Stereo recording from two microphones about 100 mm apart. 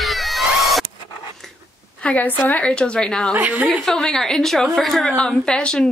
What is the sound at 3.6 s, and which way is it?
A woman's voice, 5° left (ahead or behind).